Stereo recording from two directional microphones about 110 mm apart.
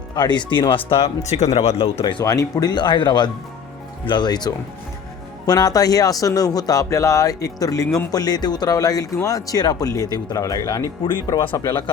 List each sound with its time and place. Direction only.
0.1 s speech: 40° left (ahead or behind)
2.2 s speech: 35° left (ahead or behind)